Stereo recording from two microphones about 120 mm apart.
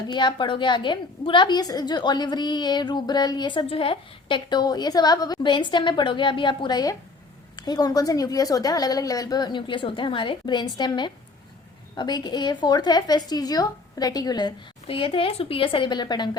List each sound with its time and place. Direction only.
0.1 s a woman's voice: 40° left (ahead or behind)
14.8 s a woman's voice: 50° left (ahead or behind)